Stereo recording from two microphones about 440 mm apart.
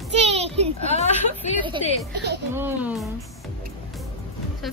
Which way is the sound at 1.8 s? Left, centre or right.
Centre.